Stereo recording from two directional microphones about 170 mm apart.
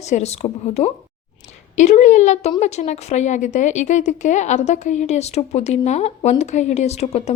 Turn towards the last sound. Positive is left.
turn(degrees=40)  # may be behind; listen again after turning